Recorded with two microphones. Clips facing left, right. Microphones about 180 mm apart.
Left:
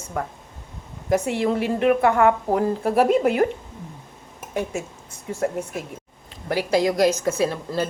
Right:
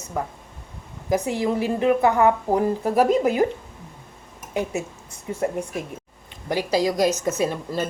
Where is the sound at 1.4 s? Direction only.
15° right (ahead or behind).